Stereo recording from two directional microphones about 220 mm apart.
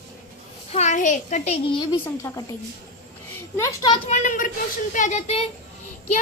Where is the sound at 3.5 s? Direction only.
15° left (ahead or behind).